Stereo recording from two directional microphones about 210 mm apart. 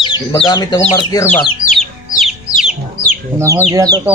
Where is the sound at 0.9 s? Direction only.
15° left (ahead or behind).